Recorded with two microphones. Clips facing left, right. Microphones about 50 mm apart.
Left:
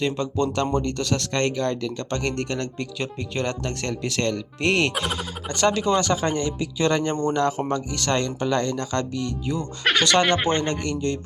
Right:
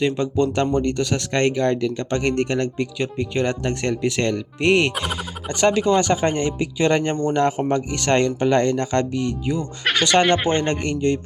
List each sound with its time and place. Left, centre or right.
0.0 s speech: centre
4.9 s speech: centre
5.5 s speech: centre
9.5 s speech: centre
10.5 s speech: right